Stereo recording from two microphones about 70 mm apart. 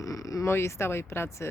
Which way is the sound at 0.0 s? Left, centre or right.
Left.